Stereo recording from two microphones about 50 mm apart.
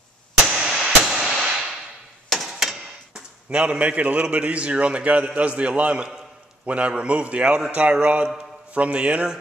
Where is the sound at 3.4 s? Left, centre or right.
Right.